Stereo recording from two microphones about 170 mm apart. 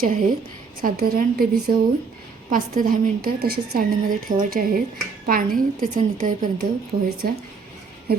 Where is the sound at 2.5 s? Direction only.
60° right (ahead or behind).